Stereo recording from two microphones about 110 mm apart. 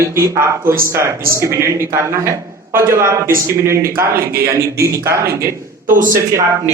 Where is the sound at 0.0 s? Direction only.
25° right (ahead or behind).